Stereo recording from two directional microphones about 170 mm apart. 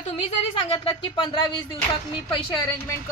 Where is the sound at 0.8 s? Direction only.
25° left (ahead or behind).